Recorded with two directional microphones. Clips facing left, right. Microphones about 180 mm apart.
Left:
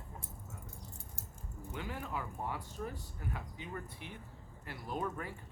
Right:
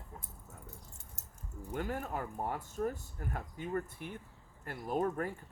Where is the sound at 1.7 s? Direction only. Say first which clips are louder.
Right 4 dB; 45° right (ahead or behind).